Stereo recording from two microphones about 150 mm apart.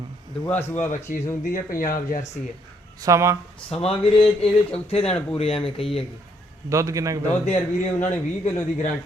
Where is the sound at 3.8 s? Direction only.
40° left (ahead or behind).